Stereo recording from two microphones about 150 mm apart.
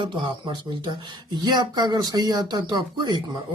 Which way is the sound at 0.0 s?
30° right (ahead or behind).